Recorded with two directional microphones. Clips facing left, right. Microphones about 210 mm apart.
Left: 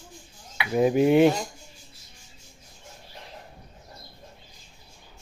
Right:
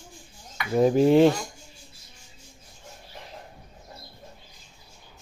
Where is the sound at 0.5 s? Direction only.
10° left (ahead or behind).